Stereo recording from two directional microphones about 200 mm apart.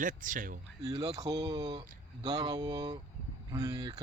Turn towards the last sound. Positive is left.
turn(degrees=-20)  # may be behind; listen again after turning